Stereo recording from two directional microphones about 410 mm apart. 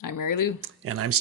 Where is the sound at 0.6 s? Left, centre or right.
Right.